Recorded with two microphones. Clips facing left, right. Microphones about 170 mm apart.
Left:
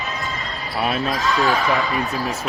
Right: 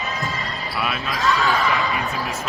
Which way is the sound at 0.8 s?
35° left (ahead or behind).